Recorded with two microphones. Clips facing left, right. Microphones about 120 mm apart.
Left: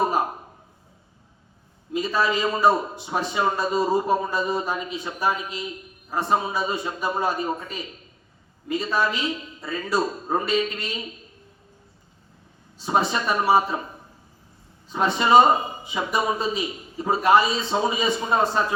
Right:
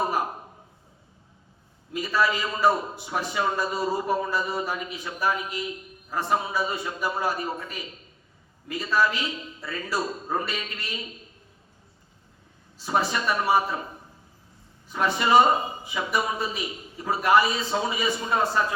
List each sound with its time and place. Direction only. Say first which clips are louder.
2.0 s a man's voice: left 2 dB; 25° left (ahead or behind)
12.8 s a man's voice: left 2 dB; 25° left (ahead or behind)
14.8 s a man's voice: left 3 dB; 25° left (ahead or behind)